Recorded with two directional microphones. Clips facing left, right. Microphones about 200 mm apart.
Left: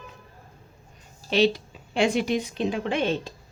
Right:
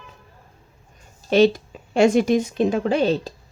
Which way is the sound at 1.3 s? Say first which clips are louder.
Right 6 dB; 45° right (ahead or behind).